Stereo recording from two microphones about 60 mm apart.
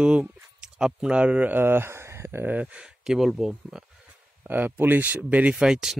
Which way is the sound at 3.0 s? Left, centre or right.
Centre.